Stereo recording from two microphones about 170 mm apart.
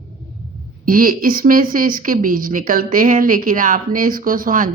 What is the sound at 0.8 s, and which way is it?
Speech, 55° right (ahead or behind).